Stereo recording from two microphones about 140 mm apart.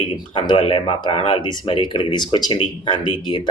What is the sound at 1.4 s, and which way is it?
Speech, 35° left (ahead or behind).